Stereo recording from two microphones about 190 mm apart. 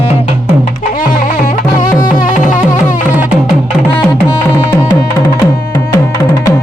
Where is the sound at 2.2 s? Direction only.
40° left (ahead or behind).